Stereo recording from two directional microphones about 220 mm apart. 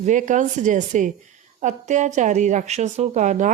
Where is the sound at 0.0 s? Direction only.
35° right (ahead or behind).